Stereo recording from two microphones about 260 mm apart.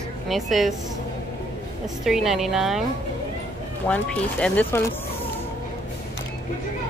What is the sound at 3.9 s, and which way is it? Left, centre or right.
Speech, centre.